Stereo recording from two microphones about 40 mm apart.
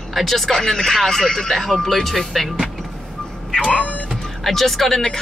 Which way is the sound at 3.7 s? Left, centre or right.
Left.